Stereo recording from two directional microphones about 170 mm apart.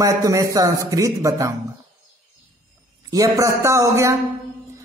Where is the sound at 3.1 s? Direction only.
20° right (ahead or behind).